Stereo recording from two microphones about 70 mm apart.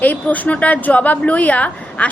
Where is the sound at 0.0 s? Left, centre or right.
Left.